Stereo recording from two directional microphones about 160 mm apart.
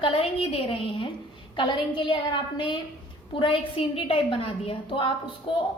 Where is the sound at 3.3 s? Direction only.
35° left (ahead or behind).